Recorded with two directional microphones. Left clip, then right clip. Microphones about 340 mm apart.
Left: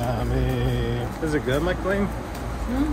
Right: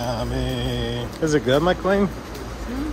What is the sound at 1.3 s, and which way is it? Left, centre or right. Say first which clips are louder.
Speech: right 6 dB; centre.